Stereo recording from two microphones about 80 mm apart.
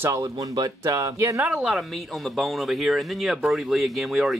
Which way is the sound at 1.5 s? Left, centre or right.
Centre.